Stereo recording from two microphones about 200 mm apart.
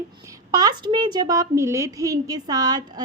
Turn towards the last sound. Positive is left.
turn(degrees=-20)  # may be behind; listen again after turning